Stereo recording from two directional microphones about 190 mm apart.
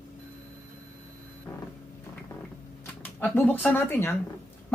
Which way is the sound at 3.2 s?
10° left (ahead or behind).